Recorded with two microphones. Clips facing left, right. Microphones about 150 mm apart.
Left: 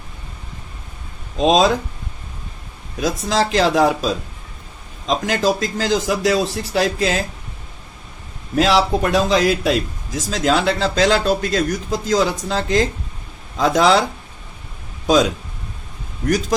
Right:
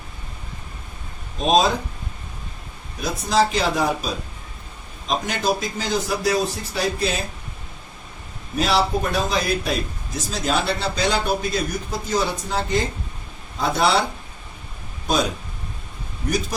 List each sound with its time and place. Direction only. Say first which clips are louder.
1.4 s a man's voice: left 3 dB; 90° left
3.0 s a man's voice: left 1 dB; 90° left
8.5 s a man's voice: left 5 dB; 90° left
15.0 s a man's voice: left 7 dB; 90° left